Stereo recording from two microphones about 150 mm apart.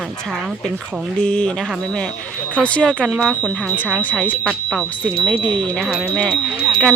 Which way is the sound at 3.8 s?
10° left (ahead or behind).